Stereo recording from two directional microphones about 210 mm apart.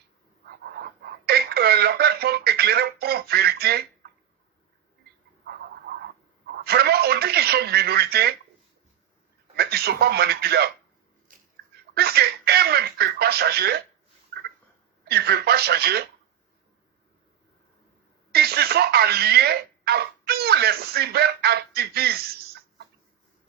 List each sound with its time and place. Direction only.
0.4 s a sound: 50° right (ahead or behind)
6.5 s telephone: 50° right (ahead or behind)
9.6 s speech: 50° right (ahead or behind)
11.3 s a sound: 40° right (ahead or behind)
11.9 s speech: 50° right (ahead or behind)
15.0 s speech: 50° right (ahead or behind)
18.3 s speech: 50° right (ahead or behind)